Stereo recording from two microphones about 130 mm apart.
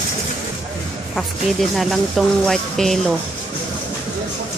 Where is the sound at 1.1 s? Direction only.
Centre (ahead or behind).